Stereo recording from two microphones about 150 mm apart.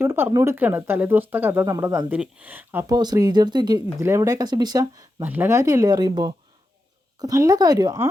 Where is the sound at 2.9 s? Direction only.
25° right (ahead or behind).